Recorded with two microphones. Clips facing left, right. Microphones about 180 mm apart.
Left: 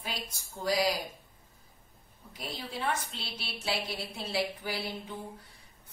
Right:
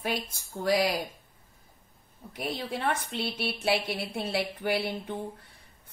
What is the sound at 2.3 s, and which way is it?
Speech, 60° right (ahead or behind).